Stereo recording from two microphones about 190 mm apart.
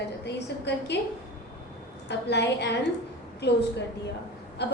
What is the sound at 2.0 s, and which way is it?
A woman's voice, 65° left (ahead or behind).